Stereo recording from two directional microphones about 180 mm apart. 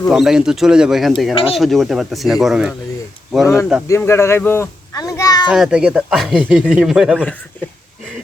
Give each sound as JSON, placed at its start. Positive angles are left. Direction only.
{"t": 0.1, "sound": "speech", "side_deg": 0}
{"t": 3.4, "sound": "a child's voice", "side_deg": 15}
{"t": 5.5, "sound": "speech", "side_deg": -5}